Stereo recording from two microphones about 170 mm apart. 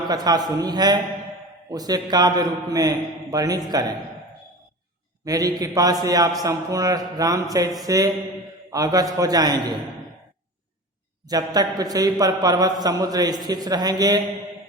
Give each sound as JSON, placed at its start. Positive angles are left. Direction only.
{"t": 0.1, "sound": "a man's voice", "side_deg": -25}
{"t": 5.2, "sound": "a man's voice", "side_deg": -20}
{"t": 11.3, "sound": "a man's voice", "side_deg": -20}